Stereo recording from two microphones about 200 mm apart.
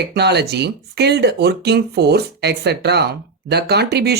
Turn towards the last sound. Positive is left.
turn(degrees=-55)  # may be behind; listen again after turning